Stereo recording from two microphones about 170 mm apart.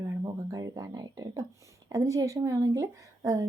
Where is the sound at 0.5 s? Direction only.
20° right (ahead or behind).